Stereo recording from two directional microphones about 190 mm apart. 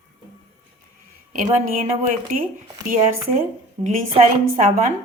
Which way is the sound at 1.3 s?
45° right (ahead or behind).